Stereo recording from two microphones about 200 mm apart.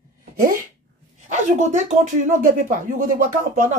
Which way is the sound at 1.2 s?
35° right (ahead or behind).